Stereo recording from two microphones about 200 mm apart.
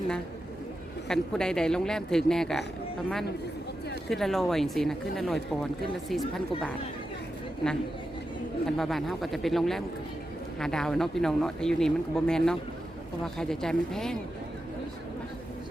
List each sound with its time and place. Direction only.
1.0 s speech: 5° left (ahead or behind)
4.1 s speech: centre (ahead or behind)
8.6 s speech: centre (ahead or behind)